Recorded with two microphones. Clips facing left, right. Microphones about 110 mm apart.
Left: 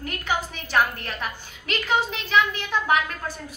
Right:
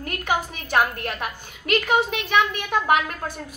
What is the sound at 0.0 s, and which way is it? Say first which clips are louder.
A woman's voice: right 2 dB; 50° right (ahead or behind).